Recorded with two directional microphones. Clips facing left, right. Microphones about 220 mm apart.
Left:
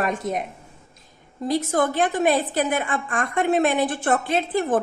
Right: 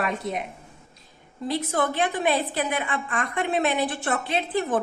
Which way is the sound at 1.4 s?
45° left (ahead or behind).